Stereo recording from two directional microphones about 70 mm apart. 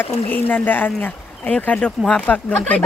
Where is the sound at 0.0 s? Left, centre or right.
Left.